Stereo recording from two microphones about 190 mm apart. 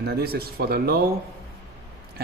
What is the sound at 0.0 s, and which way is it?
Speech, 55° right (ahead or behind).